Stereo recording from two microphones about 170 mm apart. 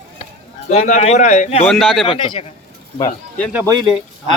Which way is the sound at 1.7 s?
Centre (ahead or behind).